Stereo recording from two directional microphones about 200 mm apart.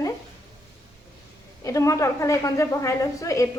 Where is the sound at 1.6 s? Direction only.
15° left (ahead or behind).